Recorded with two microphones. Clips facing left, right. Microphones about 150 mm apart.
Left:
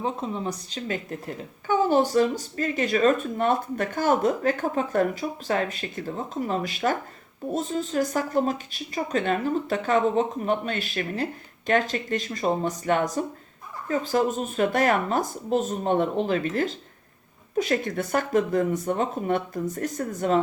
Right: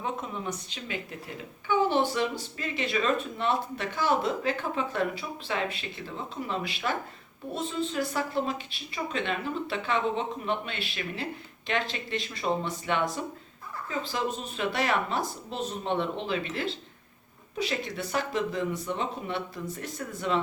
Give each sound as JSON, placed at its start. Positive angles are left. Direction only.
{"t": 0.0, "sound": "speech", "side_deg": 30}